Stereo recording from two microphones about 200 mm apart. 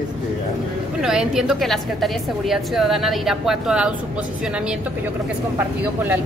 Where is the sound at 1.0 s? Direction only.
5° right (ahead or behind).